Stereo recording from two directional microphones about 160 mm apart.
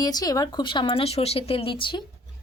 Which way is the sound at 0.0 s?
25° left (ahead or behind).